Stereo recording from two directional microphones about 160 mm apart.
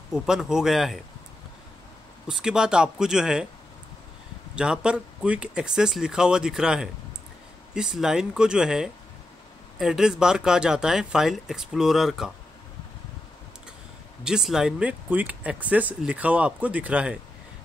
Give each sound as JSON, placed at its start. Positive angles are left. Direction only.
{"t": 0.1, "sound": "speech", "side_deg": -5}
{"t": 2.2, "sound": "speech", "side_deg": -5}
{"t": 4.6, "sound": "speech", "side_deg": -5}
{"t": 14.2, "sound": "speech", "side_deg": -5}